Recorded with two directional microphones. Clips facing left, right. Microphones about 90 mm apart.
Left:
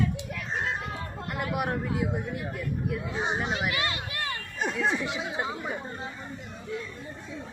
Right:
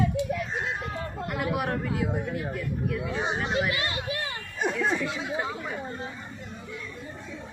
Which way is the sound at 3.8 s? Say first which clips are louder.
Right 2 dB; 25° right (ahead or behind).